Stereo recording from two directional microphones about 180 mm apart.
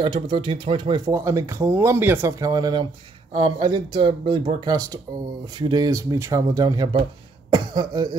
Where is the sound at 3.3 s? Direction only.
30° right (ahead or behind).